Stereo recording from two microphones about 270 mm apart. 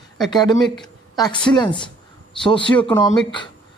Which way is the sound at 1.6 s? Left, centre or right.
Centre.